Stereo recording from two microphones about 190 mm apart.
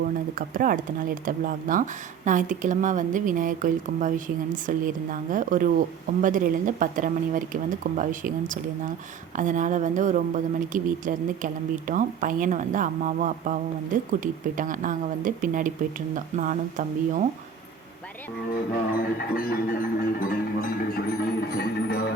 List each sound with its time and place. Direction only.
0.3 s a woman's voice: 45° right (ahead or behind)
18.9 s music: 50° left (ahead or behind)